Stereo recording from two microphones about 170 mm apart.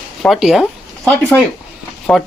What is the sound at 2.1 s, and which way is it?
Speech, 5° left (ahead or behind).